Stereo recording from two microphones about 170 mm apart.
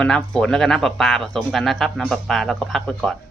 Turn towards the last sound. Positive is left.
turn(degrees=0)  # may be behind; listen again after turning